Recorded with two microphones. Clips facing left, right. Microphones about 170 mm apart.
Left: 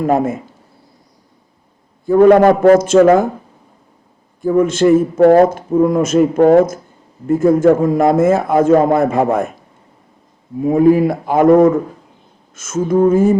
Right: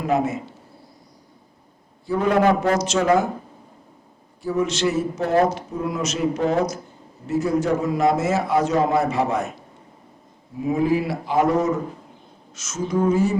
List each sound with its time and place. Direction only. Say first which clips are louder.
0.0 s a man's voice: left 6 dB; 50° left (ahead or behind)
2.0 s a man's voice: left 10 dB; 55° left (ahead or behind)
4.4 s a man's voice: left 10 dB; 50° left (ahead or behind)
10.6 s a man's voice: left 10 dB; 50° left (ahead or behind)